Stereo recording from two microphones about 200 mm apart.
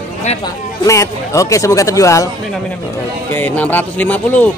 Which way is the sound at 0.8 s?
15° left (ahead or behind).